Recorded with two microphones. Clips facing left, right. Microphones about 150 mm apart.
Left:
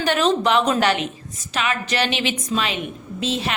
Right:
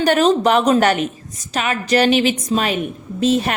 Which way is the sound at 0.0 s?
45° right (ahead or behind).